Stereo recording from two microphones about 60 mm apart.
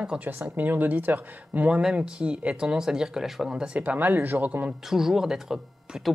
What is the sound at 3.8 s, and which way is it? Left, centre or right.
Speech, right.